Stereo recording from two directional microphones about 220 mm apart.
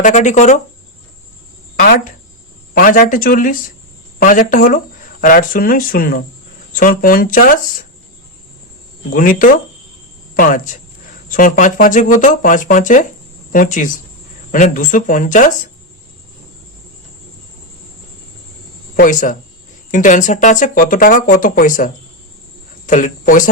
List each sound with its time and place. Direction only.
0.0 s speech: 35° left (ahead or behind)
1.7 s speech: 40° left (ahead or behind)
9.1 s speech: 40° left (ahead or behind)
18.9 s speech: 35° left (ahead or behind)
22.9 s speech: 35° left (ahead or behind)